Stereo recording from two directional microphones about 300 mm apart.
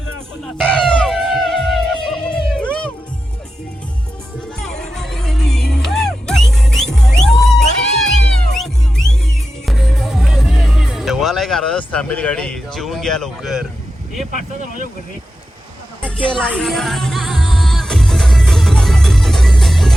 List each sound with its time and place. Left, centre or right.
0.6 s music: centre
4.6 s music: centre
14.3 s speech: right
16.2 s music: centre